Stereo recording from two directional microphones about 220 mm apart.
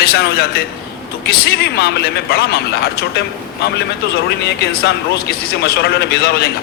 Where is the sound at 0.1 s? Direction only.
45° left (ahead or behind).